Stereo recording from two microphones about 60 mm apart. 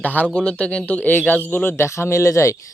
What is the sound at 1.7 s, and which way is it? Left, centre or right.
Speech, left.